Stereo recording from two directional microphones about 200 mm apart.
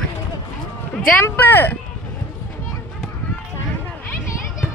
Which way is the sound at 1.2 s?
10° left (ahead or behind).